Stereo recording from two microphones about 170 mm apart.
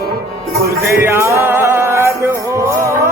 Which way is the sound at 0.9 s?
15° right (ahead or behind).